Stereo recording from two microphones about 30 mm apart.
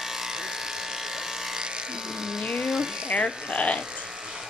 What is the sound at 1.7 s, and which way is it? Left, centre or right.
Electric shaver, right.